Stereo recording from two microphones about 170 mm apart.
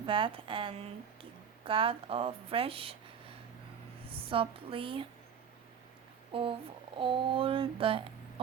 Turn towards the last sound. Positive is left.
turn(degrees=-30)  # may be behind; listen again after turning